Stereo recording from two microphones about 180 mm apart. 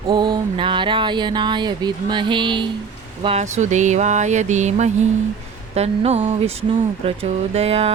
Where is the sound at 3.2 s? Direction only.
35° right (ahead or behind).